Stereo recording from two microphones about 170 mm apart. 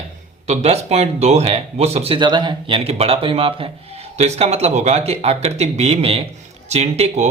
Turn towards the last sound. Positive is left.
turn(degrees=-35)  # may be behind; listen again after turning